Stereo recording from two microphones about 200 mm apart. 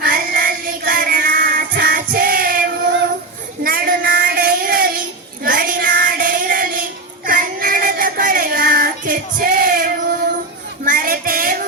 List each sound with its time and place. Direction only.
0.0 s music: 45° right (ahead or behind)
3.6 s child singing: 45° right (ahead or behind)
10.8 s music: 45° right (ahead or behind)